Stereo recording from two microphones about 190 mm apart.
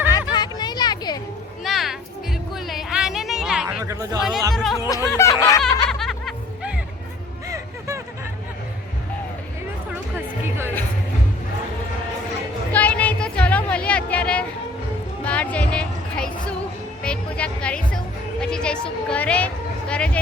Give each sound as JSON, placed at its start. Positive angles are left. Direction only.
{"t": 0.1, "sound": "a sound", "side_deg": 20}
{"t": 1.6, "sound": "music", "side_deg": 0}
{"t": 2.6, "sound": "a sound", "side_deg": 0}
{"t": 3.8, "sound": "speech", "side_deg": -20}
{"t": 4.5, "sound": "music", "side_deg": 0}
{"t": 4.9, "sound": "music", "side_deg": 15}
{"t": 5.6, "sound": "snicker", "side_deg": 0}
{"t": 7.4, "sound": "music", "side_deg": -15}
{"t": 9.9, "sound": "music", "side_deg": -10}
{"t": 12.7, "sound": "a sound", "side_deg": 10}
{"t": 15.2, "sound": "music", "side_deg": 5}